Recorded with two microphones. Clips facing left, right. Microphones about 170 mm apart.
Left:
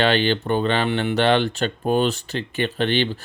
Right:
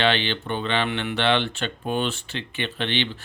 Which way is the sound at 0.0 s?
40° left (ahead or behind).